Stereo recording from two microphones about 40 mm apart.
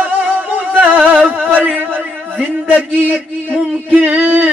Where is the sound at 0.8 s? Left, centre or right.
Right.